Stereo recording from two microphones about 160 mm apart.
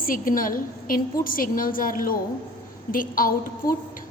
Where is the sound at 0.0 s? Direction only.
60° left (ahead or behind).